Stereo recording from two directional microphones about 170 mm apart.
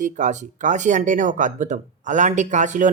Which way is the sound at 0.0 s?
45° right (ahead or behind).